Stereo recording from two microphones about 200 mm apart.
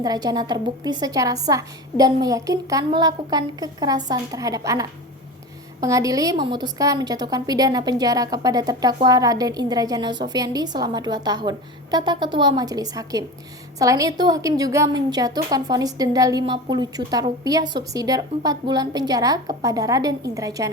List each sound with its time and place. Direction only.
0.0 s a woman's voice: 20° right (ahead or behind)